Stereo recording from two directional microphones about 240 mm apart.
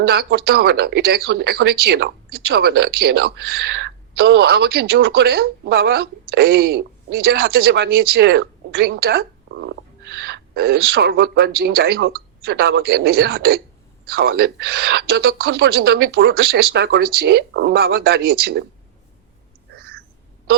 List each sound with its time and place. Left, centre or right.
0.0 s speech: right